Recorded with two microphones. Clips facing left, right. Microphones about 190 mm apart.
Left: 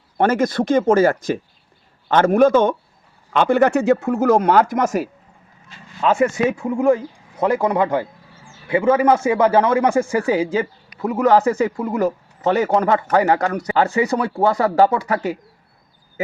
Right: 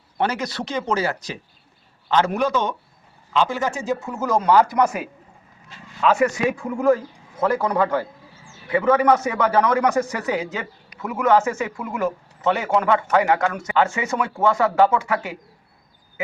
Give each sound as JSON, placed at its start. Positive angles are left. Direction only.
{"t": 0.2, "sound": "speech", "side_deg": 50}
{"t": 6.0, "sound": "speech", "side_deg": 30}